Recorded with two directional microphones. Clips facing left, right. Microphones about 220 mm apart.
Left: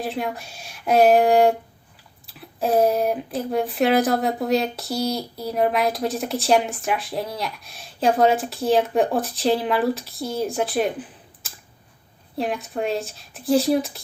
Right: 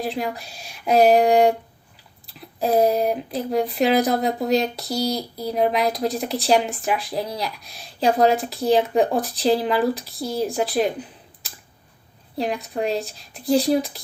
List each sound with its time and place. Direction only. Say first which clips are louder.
0.0 s speech: right 1 dB; centre (ahead or behind)